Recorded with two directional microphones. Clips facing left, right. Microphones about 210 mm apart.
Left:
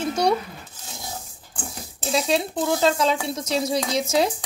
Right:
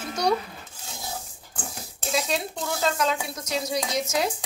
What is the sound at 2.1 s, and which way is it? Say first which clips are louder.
Speech: left 5 dB; 30° left (ahead or behind).